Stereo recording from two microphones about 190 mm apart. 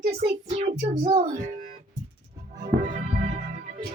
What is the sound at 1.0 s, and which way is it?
Speech, 45° right (ahead or behind).